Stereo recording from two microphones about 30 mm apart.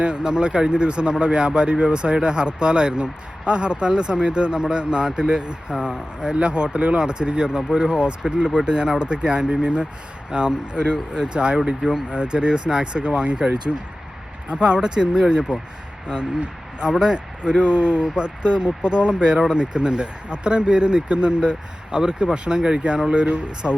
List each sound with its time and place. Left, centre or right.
0.0 s speech: right
5.0 s speech: centre
5.3 s speech: right
12.1 s speech: right
14.5 s speech: right
16.9 s speech: centre
17.4 s speech: right
23.6 s speech: left